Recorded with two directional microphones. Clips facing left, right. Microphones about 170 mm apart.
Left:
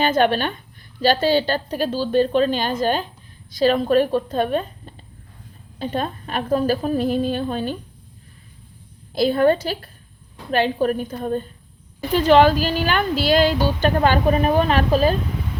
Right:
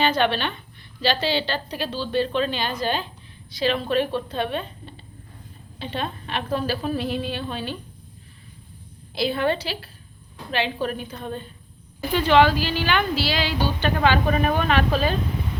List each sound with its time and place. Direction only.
0.0 s a woman's voice: 45° left (ahead or behind)
9.1 s a woman's voice: 45° left (ahead or behind)